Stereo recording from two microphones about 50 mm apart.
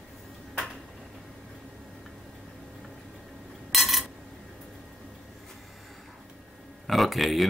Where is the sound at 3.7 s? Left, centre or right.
Centre.